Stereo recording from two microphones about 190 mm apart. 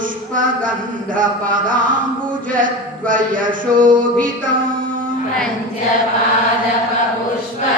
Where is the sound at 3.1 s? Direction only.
45° right (ahead or behind).